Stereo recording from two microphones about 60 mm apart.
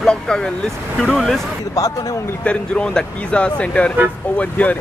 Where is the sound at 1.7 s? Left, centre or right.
Left.